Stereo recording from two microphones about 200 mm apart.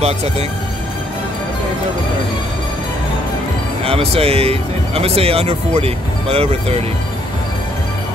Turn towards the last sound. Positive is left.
turn(degrees=-30)  # may be behind; listen again after turning